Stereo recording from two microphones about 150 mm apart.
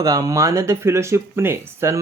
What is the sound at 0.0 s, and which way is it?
Speech, 25° right (ahead or behind).